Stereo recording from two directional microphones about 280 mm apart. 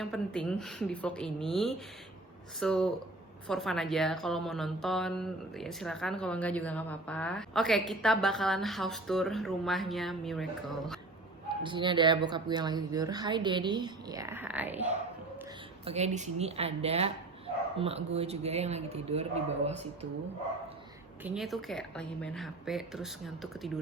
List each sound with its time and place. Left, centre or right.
0.0 s speech: centre
11.4 s speech: centre
15.8 s speech: right
21.2 s speech: centre